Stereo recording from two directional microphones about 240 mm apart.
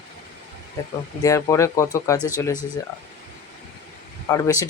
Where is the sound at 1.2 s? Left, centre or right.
Centre.